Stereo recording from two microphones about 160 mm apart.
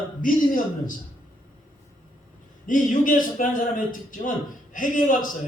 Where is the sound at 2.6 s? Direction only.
55° left (ahead or behind).